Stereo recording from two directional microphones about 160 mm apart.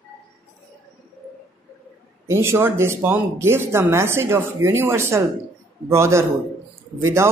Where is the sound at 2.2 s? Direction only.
15° right (ahead or behind).